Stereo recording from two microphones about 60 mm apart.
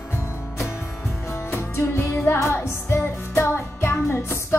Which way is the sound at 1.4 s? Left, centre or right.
Left.